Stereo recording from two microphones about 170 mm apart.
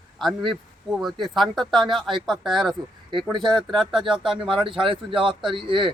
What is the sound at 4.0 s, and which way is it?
Speech, 30° right (ahead or behind).